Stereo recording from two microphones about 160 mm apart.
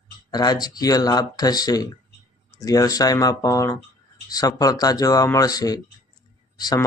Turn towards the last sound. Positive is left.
turn(degrees=25)  # may be behind; listen again after turning